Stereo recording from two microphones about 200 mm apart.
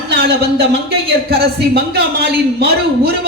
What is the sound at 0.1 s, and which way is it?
Speech, 55° right (ahead or behind).